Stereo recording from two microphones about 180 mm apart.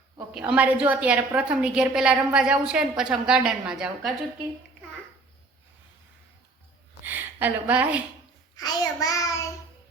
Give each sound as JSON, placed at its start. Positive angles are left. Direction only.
{"t": 0.3, "sound": "a woman's voice", "side_deg": -5}
{"t": 7.0, "sound": "a woman's voice", "side_deg": -10}
{"t": 8.5, "sound": "child singing", "side_deg": 20}